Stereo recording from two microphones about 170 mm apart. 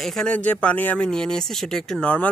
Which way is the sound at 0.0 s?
5° left (ahead or behind).